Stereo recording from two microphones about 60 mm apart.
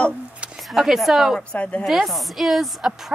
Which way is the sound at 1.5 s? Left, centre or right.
Left.